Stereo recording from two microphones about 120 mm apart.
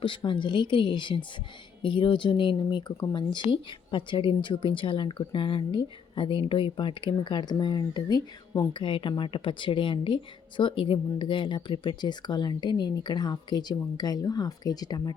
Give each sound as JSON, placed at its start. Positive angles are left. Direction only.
{"t": 0.0, "sound": "speech", "side_deg": 45}